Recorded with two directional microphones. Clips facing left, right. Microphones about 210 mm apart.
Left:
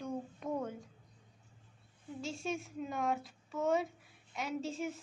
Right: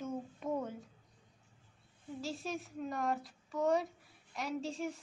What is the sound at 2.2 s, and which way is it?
Speech, centre (ahead or behind).